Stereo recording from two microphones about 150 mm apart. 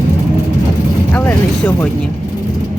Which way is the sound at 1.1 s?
15° left (ahead or behind).